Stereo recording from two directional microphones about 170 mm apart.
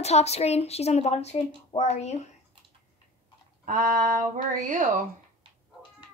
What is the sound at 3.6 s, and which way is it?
Speech, 50° right (ahead or behind).